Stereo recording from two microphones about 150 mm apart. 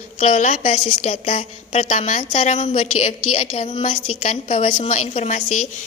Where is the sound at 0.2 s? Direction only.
55° left (ahead or behind).